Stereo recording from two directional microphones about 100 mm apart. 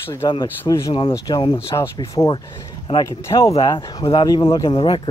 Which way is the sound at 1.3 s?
45° left (ahead or behind).